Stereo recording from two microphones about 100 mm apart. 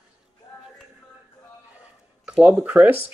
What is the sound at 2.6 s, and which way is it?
Speech, 15° right (ahead or behind).